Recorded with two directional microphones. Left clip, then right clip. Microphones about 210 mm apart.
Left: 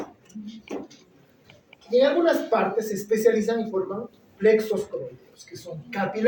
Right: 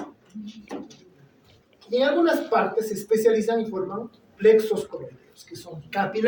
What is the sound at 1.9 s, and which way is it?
A woman's voice, 45° right (ahead or behind).